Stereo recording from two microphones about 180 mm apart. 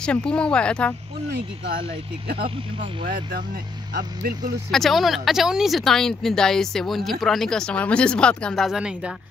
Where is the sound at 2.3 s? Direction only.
30° right (ahead or behind).